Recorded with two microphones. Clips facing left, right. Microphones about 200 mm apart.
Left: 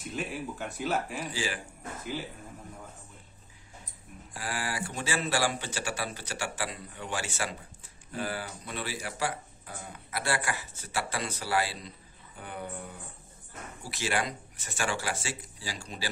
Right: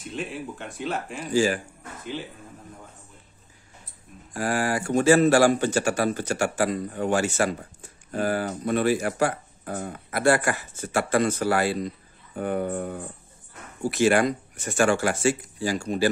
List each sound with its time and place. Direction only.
0.1 s speech: 5° left (ahead or behind)
1.3 s speech: 45° right (ahead or behind)
4.3 s speech: 45° right (ahead or behind)